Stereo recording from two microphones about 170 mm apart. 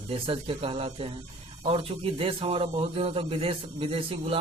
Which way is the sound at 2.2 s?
35° right (ahead or behind).